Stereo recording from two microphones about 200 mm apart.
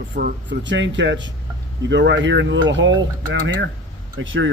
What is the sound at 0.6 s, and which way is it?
Speech, 65° right (ahead or behind).